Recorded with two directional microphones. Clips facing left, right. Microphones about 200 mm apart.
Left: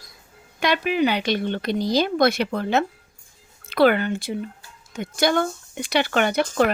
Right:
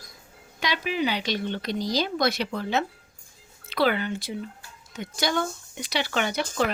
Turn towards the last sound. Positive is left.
turn(degrees=55)  # may be behind; listen again after turning